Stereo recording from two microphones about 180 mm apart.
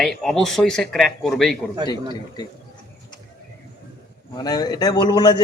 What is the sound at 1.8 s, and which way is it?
Speech, 25° left (ahead or behind).